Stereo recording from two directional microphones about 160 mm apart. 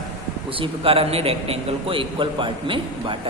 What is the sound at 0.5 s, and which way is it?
A man's voice, 35° right (ahead or behind).